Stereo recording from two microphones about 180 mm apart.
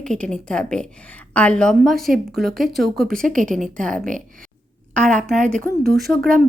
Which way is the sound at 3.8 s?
5° left (ahead or behind).